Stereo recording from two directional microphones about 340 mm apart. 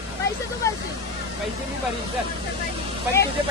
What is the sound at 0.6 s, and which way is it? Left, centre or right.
Speech, centre.